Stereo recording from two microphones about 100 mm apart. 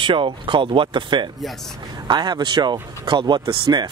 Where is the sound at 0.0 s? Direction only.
55° right (ahead or behind).